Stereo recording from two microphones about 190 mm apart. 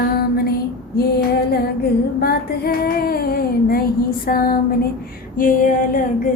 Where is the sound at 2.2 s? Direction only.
50° left (ahead or behind).